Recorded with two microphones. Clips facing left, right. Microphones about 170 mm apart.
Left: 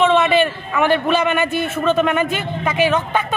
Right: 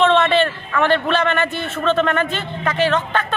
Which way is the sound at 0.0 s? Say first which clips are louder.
Left 1 dB; 10° left (ahead or behind).